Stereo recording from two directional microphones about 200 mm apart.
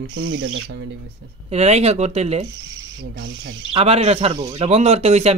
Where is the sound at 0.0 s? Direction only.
75° right (ahead or behind).